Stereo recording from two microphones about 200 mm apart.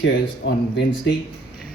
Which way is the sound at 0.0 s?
60° left (ahead or behind).